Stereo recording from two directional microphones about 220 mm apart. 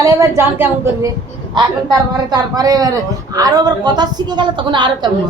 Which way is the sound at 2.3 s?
15° right (ahead or behind).